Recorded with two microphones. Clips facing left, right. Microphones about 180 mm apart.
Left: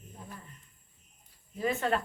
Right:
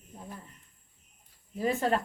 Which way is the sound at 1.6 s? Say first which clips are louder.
Right 2 dB; 35° right (ahead or behind).